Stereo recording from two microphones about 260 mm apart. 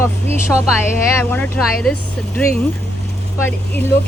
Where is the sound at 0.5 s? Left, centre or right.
Centre.